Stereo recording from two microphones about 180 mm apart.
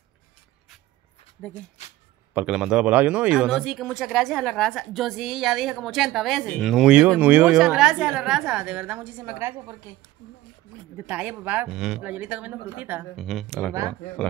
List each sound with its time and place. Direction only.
1.4 s speech: centre (ahead or behind)
1.8 s a sound: 40° left (ahead or behind)
2.3 s speech: 5° right (ahead or behind)
11.0 s speech: 10° right (ahead or behind)